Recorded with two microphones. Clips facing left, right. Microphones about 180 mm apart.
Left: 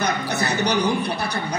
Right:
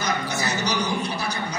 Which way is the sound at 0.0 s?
60° left (ahead or behind).